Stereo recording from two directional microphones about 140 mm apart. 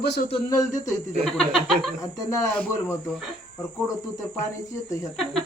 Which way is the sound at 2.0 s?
25° left (ahead or behind).